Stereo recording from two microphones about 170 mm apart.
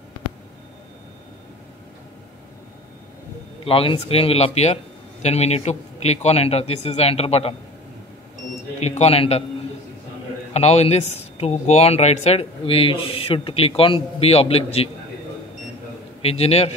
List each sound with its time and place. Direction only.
3.6 s speech: 35° left (ahead or behind)
8.8 s speech: 40° left (ahead or behind)
10.5 s speech: 40° left (ahead or behind)
16.2 s speech: 35° left (ahead or behind)